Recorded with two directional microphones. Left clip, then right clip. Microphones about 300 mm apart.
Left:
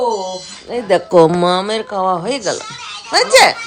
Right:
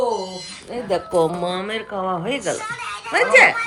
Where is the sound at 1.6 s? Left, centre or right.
Centre.